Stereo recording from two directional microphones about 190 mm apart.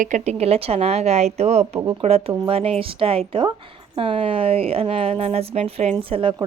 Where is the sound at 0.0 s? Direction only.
35° right (ahead or behind).